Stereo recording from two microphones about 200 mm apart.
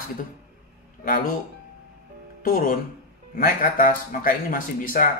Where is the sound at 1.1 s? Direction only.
45° left (ahead or behind).